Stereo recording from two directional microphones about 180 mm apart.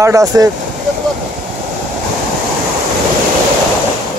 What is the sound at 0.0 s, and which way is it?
Speech, 20° right (ahead or behind).